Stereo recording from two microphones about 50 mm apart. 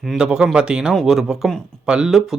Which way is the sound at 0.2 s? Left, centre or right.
Centre.